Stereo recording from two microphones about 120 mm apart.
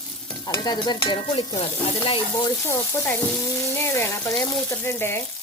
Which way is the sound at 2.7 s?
20° left (ahead or behind).